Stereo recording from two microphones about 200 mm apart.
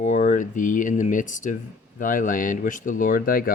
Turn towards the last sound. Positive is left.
turn(degrees=45)  # may be behind; listen again after turning